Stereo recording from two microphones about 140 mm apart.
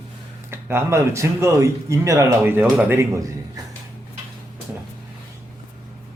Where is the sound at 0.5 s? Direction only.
15° right (ahead or behind).